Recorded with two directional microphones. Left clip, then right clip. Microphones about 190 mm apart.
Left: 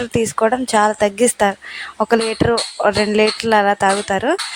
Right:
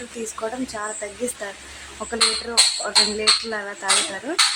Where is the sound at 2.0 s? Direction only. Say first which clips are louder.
Left 5 dB; 50° left (ahead or behind).